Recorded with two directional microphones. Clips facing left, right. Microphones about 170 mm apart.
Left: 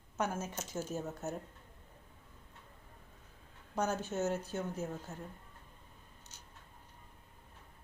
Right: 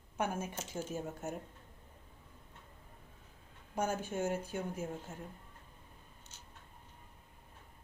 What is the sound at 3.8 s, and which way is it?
Speech, 10° right (ahead or behind).